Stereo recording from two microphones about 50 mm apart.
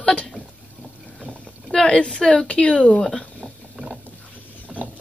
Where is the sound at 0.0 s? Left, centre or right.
Left.